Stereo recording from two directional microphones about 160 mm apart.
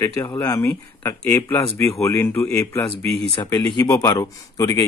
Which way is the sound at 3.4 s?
25° left (ahead or behind).